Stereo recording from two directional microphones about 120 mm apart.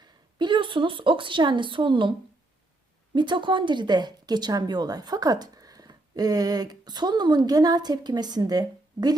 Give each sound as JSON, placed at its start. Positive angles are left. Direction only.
{"t": 0.0, "sound": "a woman's voice", "side_deg": -40}
{"t": 3.2, "sound": "a woman's voice", "side_deg": -40}